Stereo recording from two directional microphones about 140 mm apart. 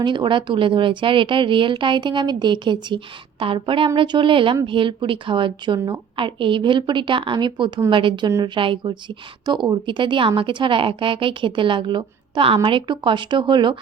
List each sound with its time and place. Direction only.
0.0 s a woman's voice: 35° right (ahead or behind)